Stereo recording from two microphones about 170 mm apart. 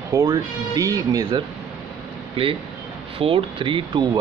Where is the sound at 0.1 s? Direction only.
20° right (ahead or behind).